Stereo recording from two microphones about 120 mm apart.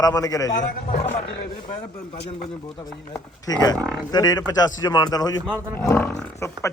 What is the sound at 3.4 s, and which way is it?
A man's voice, 35° left (ahead or behind).